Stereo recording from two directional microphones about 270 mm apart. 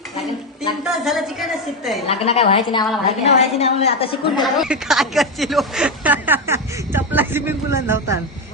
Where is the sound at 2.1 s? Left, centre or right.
Left.